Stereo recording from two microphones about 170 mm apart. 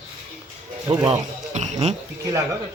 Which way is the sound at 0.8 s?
25° right (ahead or behind).